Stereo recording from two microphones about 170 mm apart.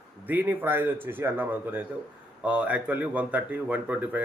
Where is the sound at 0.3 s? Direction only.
10° right (ahead or behind).